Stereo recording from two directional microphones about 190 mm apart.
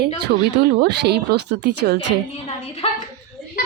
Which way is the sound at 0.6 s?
60° right (ahead or behind).